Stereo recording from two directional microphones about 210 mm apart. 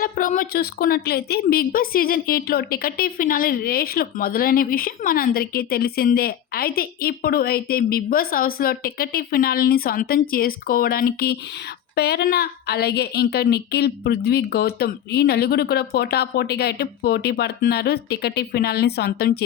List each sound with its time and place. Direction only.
0.0 s a woman's voice: 40° left (ahead or behind)